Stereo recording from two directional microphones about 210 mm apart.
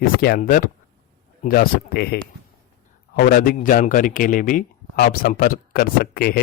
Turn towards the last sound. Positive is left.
turn(degrees=45)  # may be behind; listen again after turning